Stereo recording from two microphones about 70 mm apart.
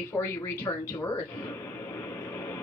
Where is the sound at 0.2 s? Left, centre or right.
Left.